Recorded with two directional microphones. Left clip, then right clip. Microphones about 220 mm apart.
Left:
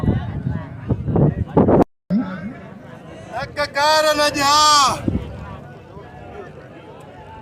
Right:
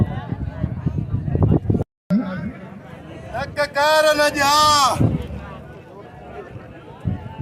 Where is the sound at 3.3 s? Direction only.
Centre (ahead or behind).